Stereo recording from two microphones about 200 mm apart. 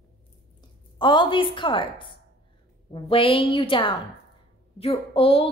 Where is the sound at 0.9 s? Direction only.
25° left (ahead or behind).